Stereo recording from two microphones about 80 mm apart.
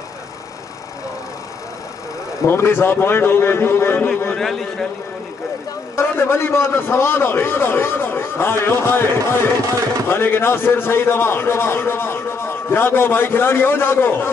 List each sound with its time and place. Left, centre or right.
2.4 s a man's voice: left
4.4 s a man's voice: centre
5.9 s a man's voice: left